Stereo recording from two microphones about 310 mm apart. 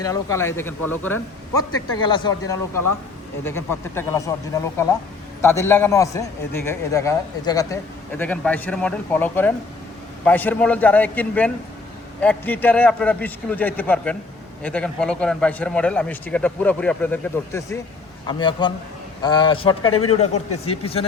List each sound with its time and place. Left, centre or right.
0.0 s a man's voice: centre